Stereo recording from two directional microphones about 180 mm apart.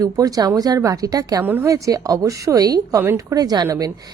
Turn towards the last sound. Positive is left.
turn(degrees=-20)  # may be behind; listen again after turning